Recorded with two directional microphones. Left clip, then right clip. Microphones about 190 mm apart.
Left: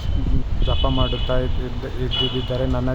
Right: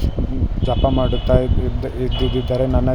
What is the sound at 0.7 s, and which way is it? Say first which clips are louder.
Speech: right 4 dB; 15° right (ahead or behind).